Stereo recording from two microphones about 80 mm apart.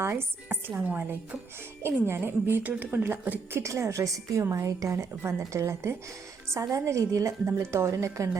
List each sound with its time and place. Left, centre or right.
0.0 s a woman's voice: right
2.0 s a woman's voice: right
3.6 s a woman's voice: right